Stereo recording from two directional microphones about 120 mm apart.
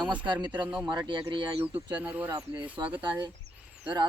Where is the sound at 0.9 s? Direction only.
40° right (ahead or behind).